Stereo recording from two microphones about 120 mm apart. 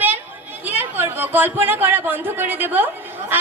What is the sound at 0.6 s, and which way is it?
A woman's voice, 15° right (ahead or behind).